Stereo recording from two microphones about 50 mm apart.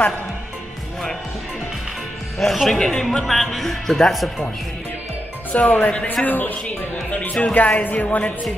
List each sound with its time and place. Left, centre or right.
2.3 s speech: centre
5.5 s speech: left
6.2 s speech: left
7.1 s speech: left